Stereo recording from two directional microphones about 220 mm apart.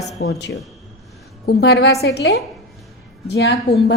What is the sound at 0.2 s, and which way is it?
A woman's voice, 50° left (ahead or behind).